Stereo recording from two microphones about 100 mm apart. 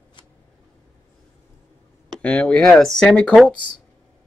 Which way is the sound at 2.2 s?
10° left (ahead or behind).